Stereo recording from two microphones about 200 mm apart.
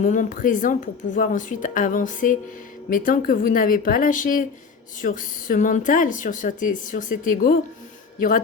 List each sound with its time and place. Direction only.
0.0 s speech: 40° left (ahead or behind)